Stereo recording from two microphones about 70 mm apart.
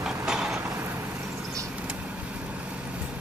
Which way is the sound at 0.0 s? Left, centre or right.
Centre.